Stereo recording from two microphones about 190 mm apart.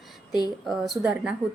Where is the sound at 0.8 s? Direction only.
5° right (ahead or behind).